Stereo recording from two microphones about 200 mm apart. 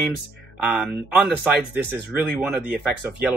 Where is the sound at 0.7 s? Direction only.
5° right (ahead or behind).